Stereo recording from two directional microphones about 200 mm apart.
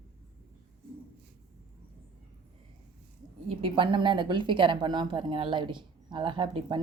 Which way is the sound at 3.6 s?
25° right (ahead or behind).